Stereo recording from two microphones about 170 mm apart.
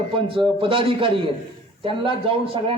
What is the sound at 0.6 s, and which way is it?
A man's voice, 30° right (ahead or behind).